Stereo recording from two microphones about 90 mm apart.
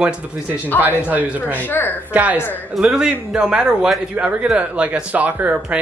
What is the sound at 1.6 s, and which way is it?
Speech, 20° left (ahead or behind).